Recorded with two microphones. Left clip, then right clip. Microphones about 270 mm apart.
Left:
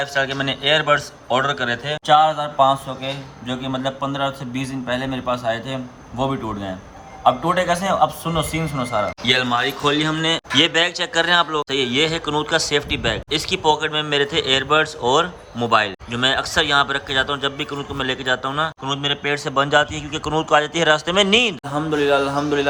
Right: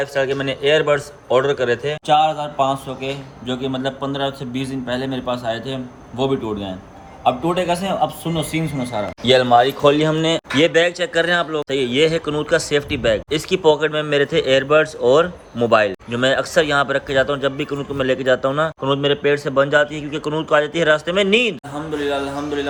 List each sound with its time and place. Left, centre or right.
0.0 s speech: centre
2.1 s a man's voice: left
8.5 s speech: left
9.2 s speech: centre